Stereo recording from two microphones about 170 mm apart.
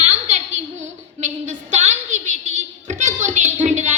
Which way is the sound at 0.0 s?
40° right (ahead or behind).